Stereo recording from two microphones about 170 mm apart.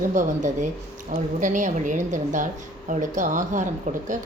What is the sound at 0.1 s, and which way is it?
Speech, 45° right (ahead or behind).